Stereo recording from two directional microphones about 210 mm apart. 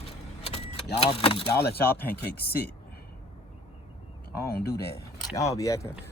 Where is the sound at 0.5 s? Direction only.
30° left (ahead or behind).